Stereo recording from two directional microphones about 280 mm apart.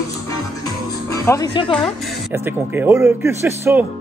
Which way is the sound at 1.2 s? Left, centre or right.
Centre.